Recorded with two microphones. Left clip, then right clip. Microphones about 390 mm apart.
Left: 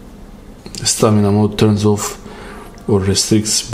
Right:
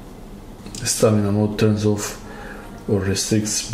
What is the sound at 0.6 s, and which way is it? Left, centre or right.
Speech, left.